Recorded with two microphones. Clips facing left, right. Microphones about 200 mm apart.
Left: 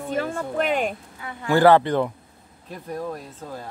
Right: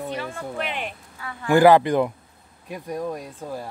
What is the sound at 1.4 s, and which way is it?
Speech, 15° right (ahead or behind).